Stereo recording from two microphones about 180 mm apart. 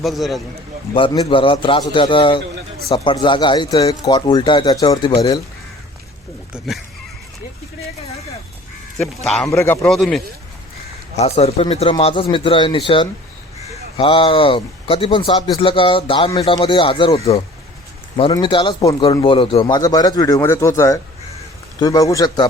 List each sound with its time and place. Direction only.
0.0 s speech: centre (ahead or behind)
0.9 s speech: 25° left (ahead or behind)
6.5 s speech: centre (ahead or behind)
9.0 s speech: 5° left (ahead or behind)
9.5 s a man's voice: 15° left (ahead or behind)
9.9 s speech: centre (ahead or behind)
11.2 s speech: 35° left (ahead or behind)
19.8 s speech: 20° left (ahead or behind)